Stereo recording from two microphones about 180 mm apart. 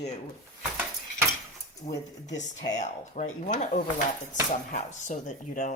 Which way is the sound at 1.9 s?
80° left.